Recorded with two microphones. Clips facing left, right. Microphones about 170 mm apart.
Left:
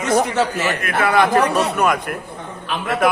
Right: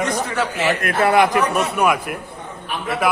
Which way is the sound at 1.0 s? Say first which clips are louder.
Right 1 dB; 25° right (ahead or behind).